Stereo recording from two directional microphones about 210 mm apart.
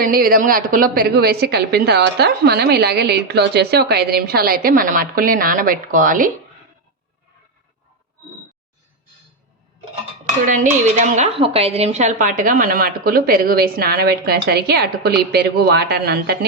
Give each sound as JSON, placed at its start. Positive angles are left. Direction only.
{"t": 0.0, "sound": "a woman's voice", "side_deg": -45}
{"t": 10.2, "sound": "dishes", "side_deg": -40}
{"t": 10.9, "sound": "a woman's voice", "side_deg": -35}